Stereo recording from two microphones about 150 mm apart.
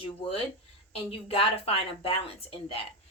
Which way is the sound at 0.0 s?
40° left (ahead or behind).